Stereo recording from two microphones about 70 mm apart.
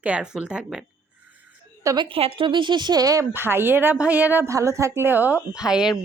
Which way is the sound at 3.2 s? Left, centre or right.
Right.